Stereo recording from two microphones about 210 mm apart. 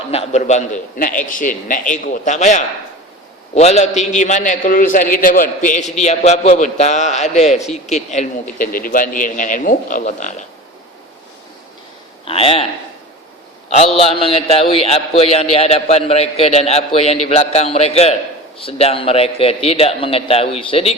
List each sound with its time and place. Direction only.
0.1 s a man's voice: 30° left (ahead or behind)
12.2 s speech: 25° left (ahead or behind)
13.7 s a man's voice: 30° left (ahead or behind)